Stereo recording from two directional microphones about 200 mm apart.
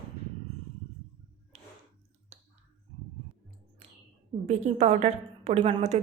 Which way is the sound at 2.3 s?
35° right (ahead or behind).